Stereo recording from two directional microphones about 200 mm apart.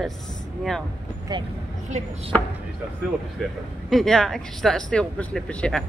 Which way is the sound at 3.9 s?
Centre (ahead or behind).